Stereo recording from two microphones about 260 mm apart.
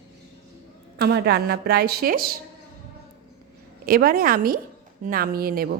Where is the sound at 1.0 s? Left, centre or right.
Right.